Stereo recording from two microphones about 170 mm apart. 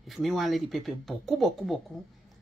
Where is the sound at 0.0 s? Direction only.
Centre (ahead or behind).